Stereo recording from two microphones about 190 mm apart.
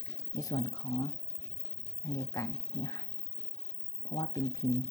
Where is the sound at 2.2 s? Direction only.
15° left (ahead or behind).